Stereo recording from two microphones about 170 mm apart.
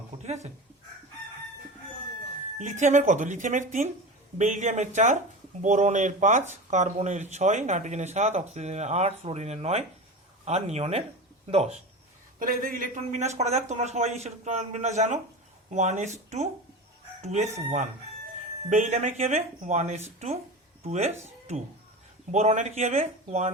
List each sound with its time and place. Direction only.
2.6 s speech: 45° right (ahead or behind)
12.4 s speech: 55° right (ahead or behind)
17.2 s speech: 40° right (ahead or behind)
22.3 s speech: 40° right (ahead or behind)